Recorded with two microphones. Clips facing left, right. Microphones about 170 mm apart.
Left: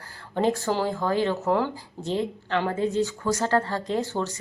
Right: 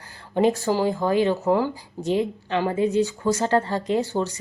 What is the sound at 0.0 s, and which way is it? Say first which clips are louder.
A woman's voice: right 4 dB; 20° right (ahead or behind).